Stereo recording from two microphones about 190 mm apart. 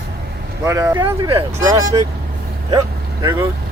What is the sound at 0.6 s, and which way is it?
Speech, 15° right (ahead or behind).